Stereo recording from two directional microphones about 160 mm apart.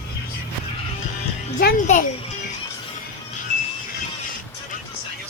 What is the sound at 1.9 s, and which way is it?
Speech, 45° left (ahead or behind).